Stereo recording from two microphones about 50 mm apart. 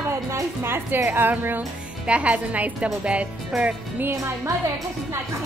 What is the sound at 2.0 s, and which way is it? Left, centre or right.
A woman's voice, right.